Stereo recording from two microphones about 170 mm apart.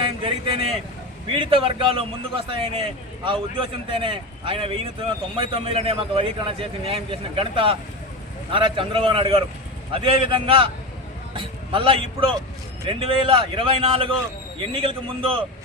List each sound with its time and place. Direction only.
0.2 s vehicle: 30° right (ahead or behind)
1.3 s a man's voice: 30° right (ahead or behind)